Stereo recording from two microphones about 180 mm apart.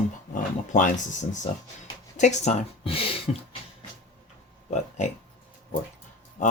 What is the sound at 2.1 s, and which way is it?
Speech, 40° left (ahead or behind).